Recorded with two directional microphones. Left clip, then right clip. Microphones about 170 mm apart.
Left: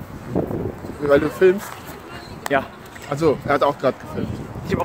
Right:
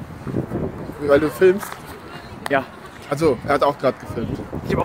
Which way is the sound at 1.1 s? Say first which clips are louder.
Even; 25° right (ahead or behind).